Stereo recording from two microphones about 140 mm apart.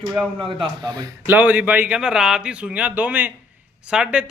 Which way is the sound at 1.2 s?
10° right (ahead or behind).